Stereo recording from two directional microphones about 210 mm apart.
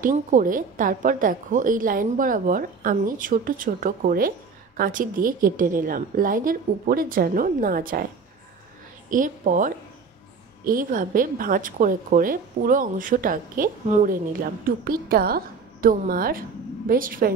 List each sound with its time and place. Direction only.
0.0 s a woman's voice: 40° right (ahead or behind)
9.1 s a woman's voice: 40° right (ahead or behind)